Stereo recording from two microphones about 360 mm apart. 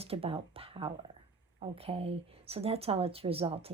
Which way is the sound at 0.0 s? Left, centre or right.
Centre.